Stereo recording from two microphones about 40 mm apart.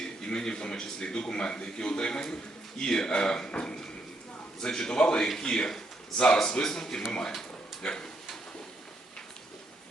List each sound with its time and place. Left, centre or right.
0.0 s a man's voice: centre
4.6 s a man's voice: centre